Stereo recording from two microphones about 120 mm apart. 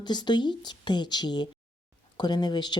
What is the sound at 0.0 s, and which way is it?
Speech, 35° left (ahead or behind).